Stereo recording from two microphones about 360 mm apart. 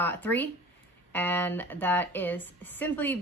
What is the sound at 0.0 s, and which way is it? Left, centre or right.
A woman's voice, centre.